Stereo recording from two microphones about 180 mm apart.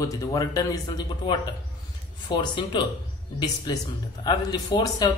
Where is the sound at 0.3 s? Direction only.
20° left (ahead or behind).